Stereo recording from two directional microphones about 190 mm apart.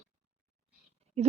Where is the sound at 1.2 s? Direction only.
35° right (ahead or behind).